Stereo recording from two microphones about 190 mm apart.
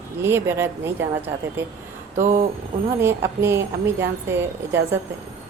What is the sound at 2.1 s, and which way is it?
Speech, 40° right (ahead or behind).